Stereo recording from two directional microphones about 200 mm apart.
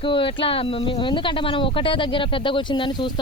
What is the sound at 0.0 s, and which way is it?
Speech, 25° left (ahead or behind).